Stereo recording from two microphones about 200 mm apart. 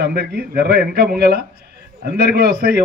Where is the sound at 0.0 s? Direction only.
50° right (ahead or behind).